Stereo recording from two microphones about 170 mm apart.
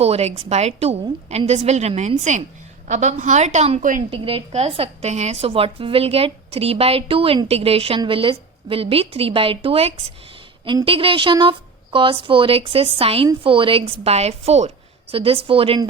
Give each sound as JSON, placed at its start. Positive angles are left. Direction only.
{"t": 0.0, "sound": "a woman's voice", "side_deg": -35}
{"t": 4.1, "sound": "a woman's voice", "side_deg": -30}